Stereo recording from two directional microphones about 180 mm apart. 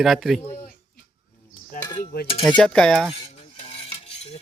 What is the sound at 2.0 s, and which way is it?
Cutlery, 55° left (ahead or behind).